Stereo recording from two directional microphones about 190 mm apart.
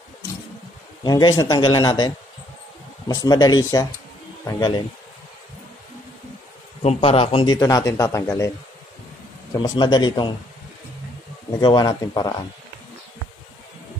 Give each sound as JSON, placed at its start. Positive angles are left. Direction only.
{"t": 1.0, "sound": "speech", "side_deg": 20}
{"t": 6.8, "sound": "a man's voice", "side_deg": 35}
{"t": 7.5, "sound": "speech", "side_deg": 15}
{"t": 9.5, "sound": "speech", "side_deg": 20}
{"t": 11.6, "sound": "speech", "side_deg": 20}